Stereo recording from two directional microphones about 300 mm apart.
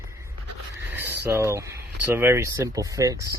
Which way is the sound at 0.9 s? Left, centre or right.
Centre.